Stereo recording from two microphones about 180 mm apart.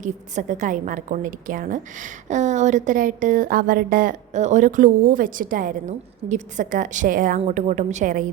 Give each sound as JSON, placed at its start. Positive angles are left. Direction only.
{"t": 0.0, "sound": "a woman's voice", "side_deg": -45}